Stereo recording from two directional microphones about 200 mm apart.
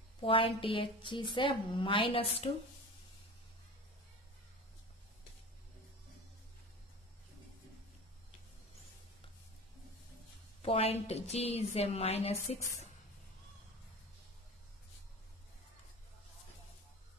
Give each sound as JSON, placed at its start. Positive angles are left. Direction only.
{"t": 0.2, "sound": "a woman's voice", "side_deg": 25}
{"t": 10.6, "sound": "a woman's voice", "side_deg": 30}